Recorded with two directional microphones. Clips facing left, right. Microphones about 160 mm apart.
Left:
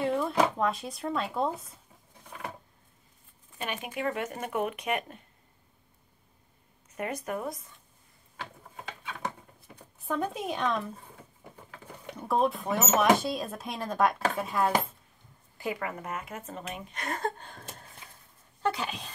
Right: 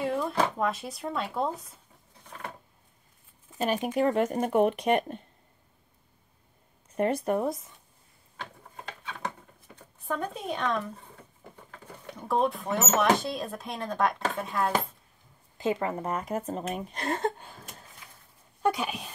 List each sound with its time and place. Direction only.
0.0 s a sound: centre (ahead or behind)
0.6 s speech: centre (ahead or behind)
2.2 s a sound: 10° left (ahead or behind)
3.5 s speech: 40° right (ahead or behind)
7.0 s speech: 30° right (ahead or behind)
8.4 s gears: 5° left (ahead or behind)
9.9 s speech: centre (ahead or behind)
12.2 s speech: centre (ahead or behind)
15.5 s speech: 25° right (ahead or behind)
18.6 s speech: 10° right (ahead or behind)